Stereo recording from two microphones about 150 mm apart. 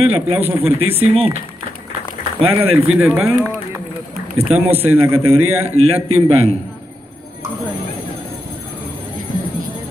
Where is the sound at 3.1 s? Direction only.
15° right (ahead or behind).